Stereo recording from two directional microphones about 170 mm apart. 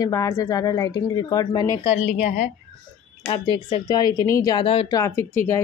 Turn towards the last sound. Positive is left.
turn(degrees=15)  # may be behind; listen again after turning